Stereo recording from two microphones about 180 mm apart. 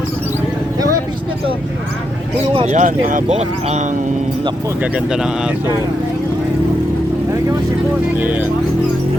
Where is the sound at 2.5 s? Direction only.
40° right (ahead or behind).